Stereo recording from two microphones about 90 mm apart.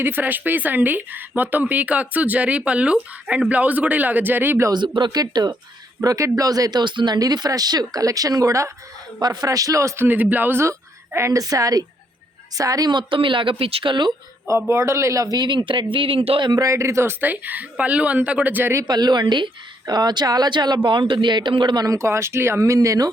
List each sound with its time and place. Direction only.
0.0 s speech: 20° right (ahead or behind)
4.7 s speech: 60° right (ahead or behind)
6.0 s speech: 35° right (ahead or behind)
9.2 s speech: 50° right (ahead or behind)
10.1 s speech: 20° right (ahead or behind)
10.6 s a woman's voice: 30° right (ahead or behind)
12.9 s speech: 65° right (ahead or behind)
14.4 s speech: 30° right (ahead or behind)
15.4 s speech: 60° right (ahead or behind); by 16.5 s 85° right
16.5 s speech: 40° right (ahead or behind); by 18.8 s 20° right (ahead or behind)
18.9 s speech: 50° right (ahead or behind)
21.8 s speech: 30° right (ahead or behind)